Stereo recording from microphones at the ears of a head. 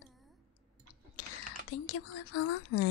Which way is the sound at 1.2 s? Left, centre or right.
Left.